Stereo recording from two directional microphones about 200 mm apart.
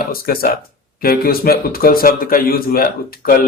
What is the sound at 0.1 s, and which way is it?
A man's voice, 50° left (ahead or behind).